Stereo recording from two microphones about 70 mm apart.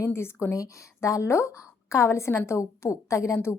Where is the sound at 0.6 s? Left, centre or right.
Left.